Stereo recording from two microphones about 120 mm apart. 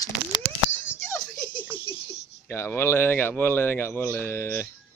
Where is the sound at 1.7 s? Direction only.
45° left (ahead or behind).